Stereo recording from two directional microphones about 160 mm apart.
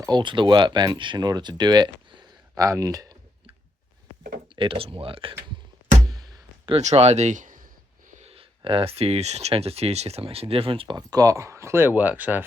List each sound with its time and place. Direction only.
0.0 s speech: 30° right (ahead or behind)
4.5 s speech: 30° right (ahead or behind)
6.7 s a sound: 40° right (ahead or behind)
8.3 s speech: 35° right (ahead or behind); by 12.5 s 10° right (ahead or behind)